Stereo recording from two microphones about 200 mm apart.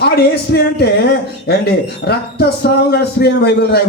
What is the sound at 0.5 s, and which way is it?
Speech, 55° left (ahead or behind).